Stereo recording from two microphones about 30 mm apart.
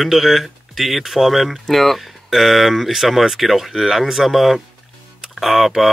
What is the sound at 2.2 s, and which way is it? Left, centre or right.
Speech, centre.